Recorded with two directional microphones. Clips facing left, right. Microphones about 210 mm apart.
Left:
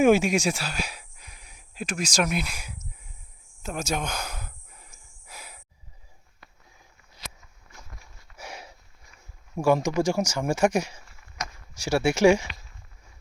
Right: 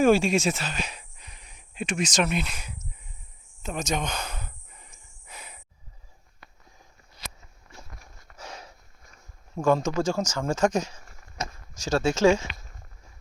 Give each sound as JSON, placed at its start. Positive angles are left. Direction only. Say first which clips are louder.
{"t": 0.0, "sound": "speech", "louder": "left 1 dB", "side_deg": 15}
{"t": 3.6, "sound": "snort", "louder": "even", "side_deg": 5}
{"t": 8.4, "sound": "sniff", "louder": "left 1 dB", "side_deg": 10}
{"t": 9.6, "sound": "speech", "louder": "left 1 dB", "side_deg": 10}
{"t": 11.0, "sound": "a sound", "louder": "right 3 dB", "side_deg": -45}
{"t": 11.8, "sound": "speech", "louder": "left 1 dB", "side_deg": 10}